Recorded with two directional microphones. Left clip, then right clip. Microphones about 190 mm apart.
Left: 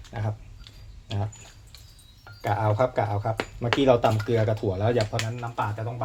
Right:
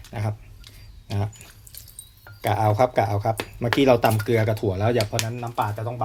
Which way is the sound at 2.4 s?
50° right (ahead or behind).